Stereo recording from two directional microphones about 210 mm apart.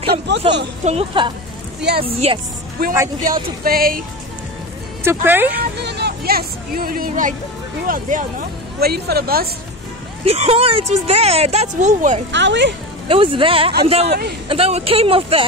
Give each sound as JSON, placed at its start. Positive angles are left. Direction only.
{"t": 0.3, "sound": "speech", "side_deg": -55}
{"t": 0.8, "sound": "speech", "side_deg": -25}
{"t": 1.8, "sound": "speech", "side_deg": -50}
{"t": 2.0, "sound": "speech", "side_deg": -25}
{"t": 2.8, "sound": "speech", "side_deg": -45}
{"t": 5.0, "sound": "speech", "side_deg": -10}
{"t": 5.6, "sound": "speech", "side_deg": -50}
{"t": 10.2, "sound": "speech", "side_deg": -30}
{"t": 12.3, "sound": "speech", "side_deg": -55}
{"t": 13.1, "sound": "speech", "side_deg": -25}